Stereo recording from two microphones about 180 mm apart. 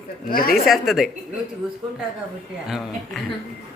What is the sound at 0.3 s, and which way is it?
Speech, 55° left (ahead or behind).